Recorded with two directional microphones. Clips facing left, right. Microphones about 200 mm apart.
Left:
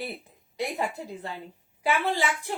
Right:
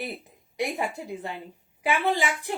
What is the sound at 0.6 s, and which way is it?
A woman's voice, 15° right (ahead or behind).